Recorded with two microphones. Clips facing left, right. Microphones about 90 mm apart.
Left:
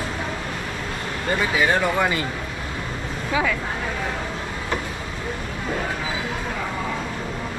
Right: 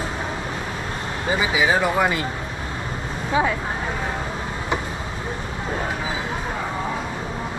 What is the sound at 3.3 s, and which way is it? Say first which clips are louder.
Speech: right 2 dB; 35° right (ahead or behind).